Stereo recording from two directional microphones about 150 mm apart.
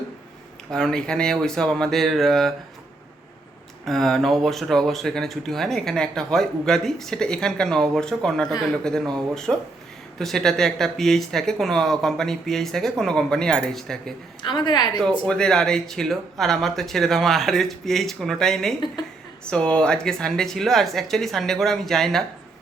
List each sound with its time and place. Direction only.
0.7 s speech: 5° left (ahead or behind)
3.8 s speech: centre (ahead or behind)
14.4 s a woman's voice: 30° left (ahead or behind)
15.2 s speech: 5° left (ahead or behind)